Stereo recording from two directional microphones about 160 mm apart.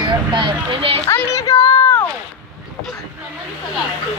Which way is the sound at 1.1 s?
15° left (ahead or behind).